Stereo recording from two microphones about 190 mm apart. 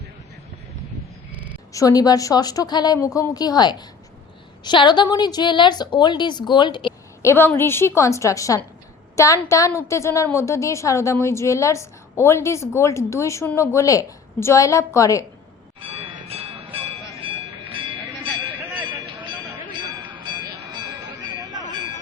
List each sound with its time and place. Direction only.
1.3 s a sound: 5° right (ahead or behind)
1.7 s a woman's voice: 20° left (ahead or behind)
7.3 s a woman's voice: 10° left (ahead or behind)
15.8 s bell: 30° right (ahead or behind)
16.7 s music: 30° right (ahead or behind)